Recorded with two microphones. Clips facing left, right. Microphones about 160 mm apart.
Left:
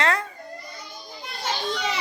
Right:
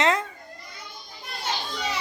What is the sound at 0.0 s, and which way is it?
Children playing, 20° right (ahead or behind).